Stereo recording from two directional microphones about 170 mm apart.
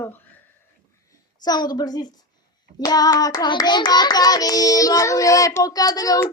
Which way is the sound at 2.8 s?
20° left (ahead or behind).